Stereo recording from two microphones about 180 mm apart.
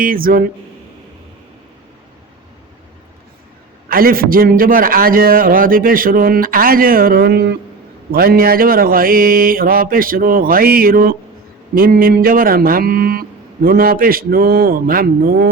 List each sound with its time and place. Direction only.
0.0 s a man's voice: 50° right (ahead or behind)
3.8 s a man's voice: 55° right (ahead or behind)